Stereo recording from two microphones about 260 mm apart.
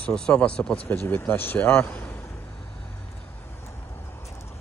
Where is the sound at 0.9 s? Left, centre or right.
Centre.